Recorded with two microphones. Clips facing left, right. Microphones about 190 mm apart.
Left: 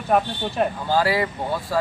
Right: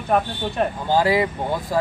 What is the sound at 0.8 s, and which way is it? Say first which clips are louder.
Speech: right 5 dB; 20° right (ahead or behind).